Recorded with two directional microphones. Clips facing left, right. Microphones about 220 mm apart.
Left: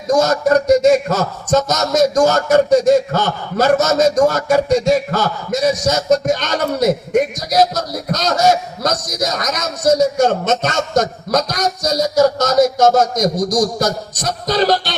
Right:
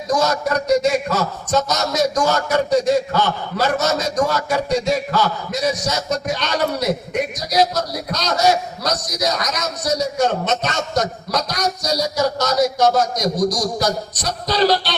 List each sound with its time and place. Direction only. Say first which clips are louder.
0.2 s a man's voice: left 6 dB; 45° left (ahead or behind)